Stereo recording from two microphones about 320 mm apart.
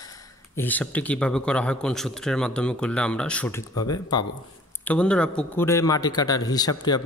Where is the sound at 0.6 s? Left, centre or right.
Centre.